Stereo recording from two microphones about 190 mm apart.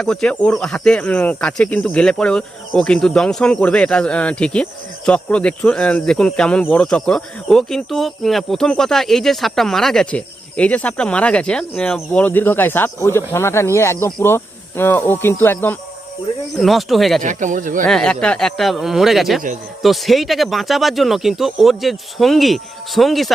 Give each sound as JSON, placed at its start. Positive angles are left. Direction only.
{"t": 0.0, "sound": "speech", "side_deg": 5}
{"t": 16.6, "sound": "speech", "side_deg": 0}
{"t": 17.2, "sound": "speech", "side_deg": -40}
{"t": 17.8, "sound": "speech", "side_deg": 5}